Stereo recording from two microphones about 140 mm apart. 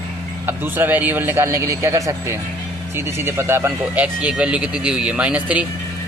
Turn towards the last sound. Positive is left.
turn(degrees=-10)  # may be behind; listen again after turning